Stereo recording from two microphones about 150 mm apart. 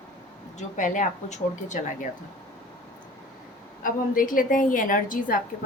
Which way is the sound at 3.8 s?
65° left (ahead or behind).